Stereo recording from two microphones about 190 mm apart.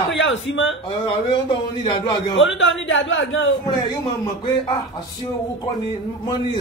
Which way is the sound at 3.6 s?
25° left (ahead or behind).